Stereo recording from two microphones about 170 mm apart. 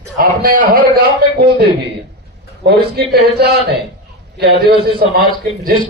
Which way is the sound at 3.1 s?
70° right (ahead or behind).